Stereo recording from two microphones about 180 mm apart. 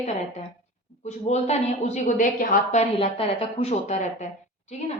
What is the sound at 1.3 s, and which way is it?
A woman's voice, 40° left (ahead or behind).